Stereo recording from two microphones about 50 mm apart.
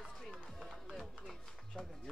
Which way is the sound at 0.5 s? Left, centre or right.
Centre.